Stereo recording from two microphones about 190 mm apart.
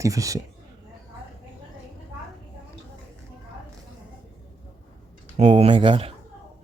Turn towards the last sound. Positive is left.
turn(degrees=-25)  # may be behind; listen again after turning